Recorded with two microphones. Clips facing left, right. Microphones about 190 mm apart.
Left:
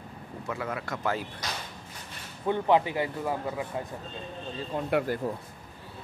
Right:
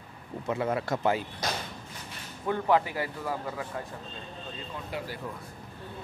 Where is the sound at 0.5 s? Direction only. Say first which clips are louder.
Right 5 dB; 25° right (ahead or behind).